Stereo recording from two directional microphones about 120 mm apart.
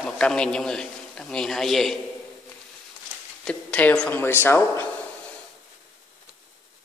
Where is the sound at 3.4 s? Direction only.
10° left (ahead or behind).